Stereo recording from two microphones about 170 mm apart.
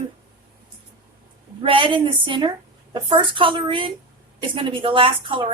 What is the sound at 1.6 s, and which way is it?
A woman's voice, 30° right (ahead or behind).